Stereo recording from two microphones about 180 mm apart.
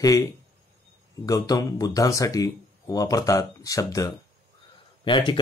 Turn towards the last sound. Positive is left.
turn(degrees=25)  # may be behind; listen again after turning